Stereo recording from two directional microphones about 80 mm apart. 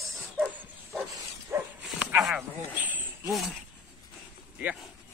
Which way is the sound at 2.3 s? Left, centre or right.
Centre.